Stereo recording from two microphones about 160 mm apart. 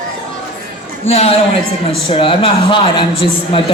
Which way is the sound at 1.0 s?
40° left (ahead or behind).